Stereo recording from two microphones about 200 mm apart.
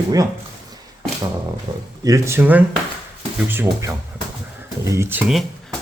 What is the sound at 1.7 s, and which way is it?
Speech, 20° right (ahead or behind).